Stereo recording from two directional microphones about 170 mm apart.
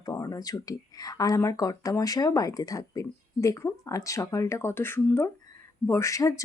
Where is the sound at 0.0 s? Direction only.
20° left (ahead or behind).